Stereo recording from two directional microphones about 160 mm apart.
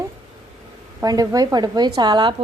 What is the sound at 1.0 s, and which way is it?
Speech, 20° right (ahead or behind).